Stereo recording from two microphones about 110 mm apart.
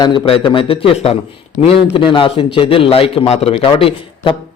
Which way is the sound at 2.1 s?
55° left (ahead or behind).